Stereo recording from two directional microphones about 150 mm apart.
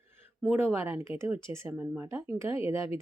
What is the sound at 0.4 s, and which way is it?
Speech, 15° right (ahead or behind).